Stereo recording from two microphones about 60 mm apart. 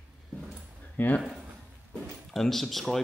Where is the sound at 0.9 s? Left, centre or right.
Left.